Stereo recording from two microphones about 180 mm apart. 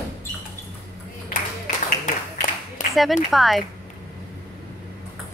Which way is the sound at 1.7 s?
40° left (ahead or behind).